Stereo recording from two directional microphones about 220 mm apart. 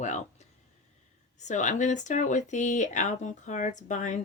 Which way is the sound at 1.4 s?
35° left (ahead or behind).